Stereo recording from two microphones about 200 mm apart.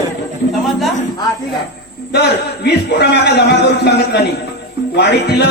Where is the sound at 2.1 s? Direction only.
55° left (ahead or behind).